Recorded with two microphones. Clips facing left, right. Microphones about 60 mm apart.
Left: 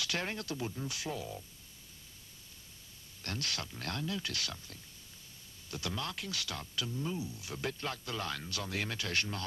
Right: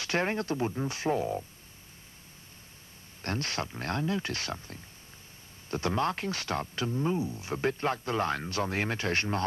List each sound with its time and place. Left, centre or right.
0.0 s speech: right
3.2 s speech: right